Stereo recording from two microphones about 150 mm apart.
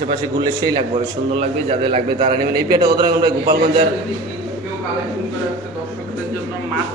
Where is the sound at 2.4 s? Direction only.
90° right.